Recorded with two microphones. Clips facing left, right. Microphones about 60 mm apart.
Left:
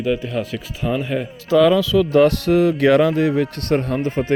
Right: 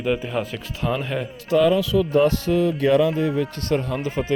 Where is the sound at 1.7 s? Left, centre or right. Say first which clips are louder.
Left 4 dB; left.